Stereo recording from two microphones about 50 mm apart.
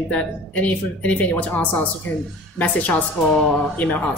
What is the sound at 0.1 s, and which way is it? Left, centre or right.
A woman's voice, left.